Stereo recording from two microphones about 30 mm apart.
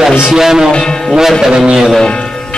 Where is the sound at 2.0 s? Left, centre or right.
Left.